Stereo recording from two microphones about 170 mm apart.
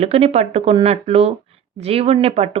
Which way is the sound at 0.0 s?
35° right (ahead or behind).